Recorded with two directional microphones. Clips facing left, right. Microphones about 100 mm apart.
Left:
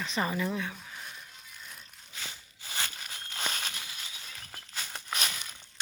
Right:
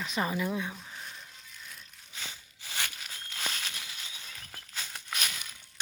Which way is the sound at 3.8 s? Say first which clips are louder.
Left 1 dB; 15° left (ahead or behind).